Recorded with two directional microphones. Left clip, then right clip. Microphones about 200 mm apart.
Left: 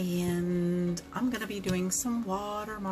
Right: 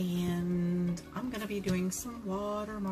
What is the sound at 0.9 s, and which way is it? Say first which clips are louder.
A woman's voice: left 6 dB; 20° left (ahead or behind).